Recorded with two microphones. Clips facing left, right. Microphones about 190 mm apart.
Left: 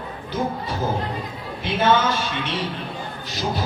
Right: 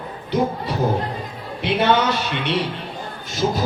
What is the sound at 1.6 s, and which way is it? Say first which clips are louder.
Speech: right 1 dB; 65° right (ahead or behind).